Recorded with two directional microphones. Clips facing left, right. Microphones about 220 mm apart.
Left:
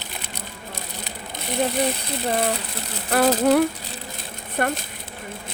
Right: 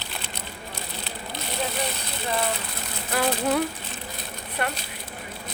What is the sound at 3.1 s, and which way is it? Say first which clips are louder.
Speech: left 7 dB; 45° left (ahead or behind).